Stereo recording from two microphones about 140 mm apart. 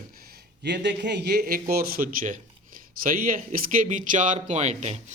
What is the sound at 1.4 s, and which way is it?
A man's voice, 90° right.